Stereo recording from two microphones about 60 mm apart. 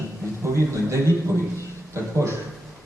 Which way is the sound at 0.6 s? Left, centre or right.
Right.